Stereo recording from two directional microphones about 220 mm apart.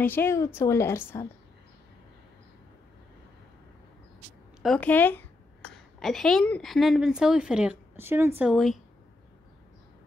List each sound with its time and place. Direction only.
0.0 s a woman's voice: 10° left (ahead or behind)
4.6 s a woman's voice: 5° left (ahead or behind)